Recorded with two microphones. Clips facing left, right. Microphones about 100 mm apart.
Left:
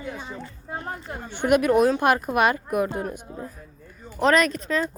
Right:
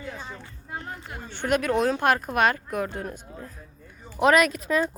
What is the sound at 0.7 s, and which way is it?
Speech, 35° left (ahead or behind).